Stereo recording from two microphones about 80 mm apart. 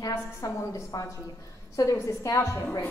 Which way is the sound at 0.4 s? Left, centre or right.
Left.